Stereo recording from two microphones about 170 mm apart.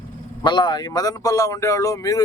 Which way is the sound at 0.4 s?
25° left (ahead or behind).